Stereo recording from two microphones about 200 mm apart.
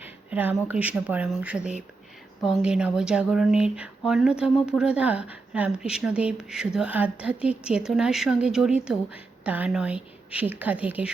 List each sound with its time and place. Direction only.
0.0 s speech: 10° right (ahead or behind)